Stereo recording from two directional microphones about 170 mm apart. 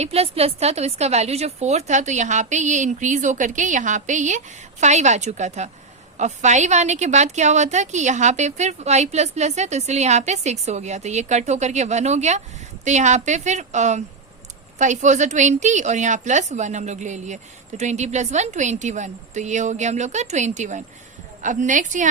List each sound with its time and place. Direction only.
0.0 s a woman's voice: 35° right (ahead or behind)